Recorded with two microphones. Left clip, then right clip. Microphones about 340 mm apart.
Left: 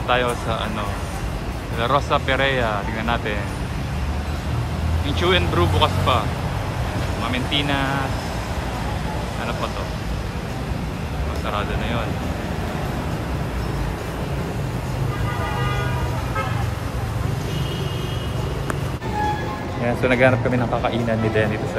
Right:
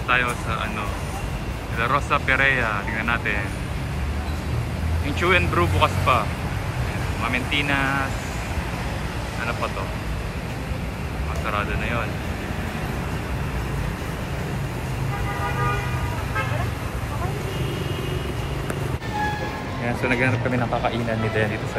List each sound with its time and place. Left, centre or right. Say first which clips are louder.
0.1 s speech: left 1 dB; centre
1.8 s speech: left 2 dB; centre
5.2 s speech: even; centre
7.2 s speech: even; centre
20.0 s speech: left 6 dB; centre